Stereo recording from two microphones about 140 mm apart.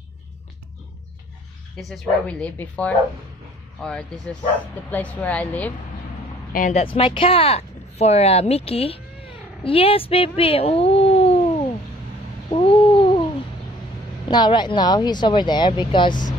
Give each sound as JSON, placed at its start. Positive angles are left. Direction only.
{"t": 1.8, "sound": "speech", "side_deg": 5}
{"t": 6.7, "sound": "speech", "side_deg": 40}
{"t": 12.4, "sound": "babbling", "side_deg": 40}
{"t": 14.2, "sound": "speech", "side_deg": 30}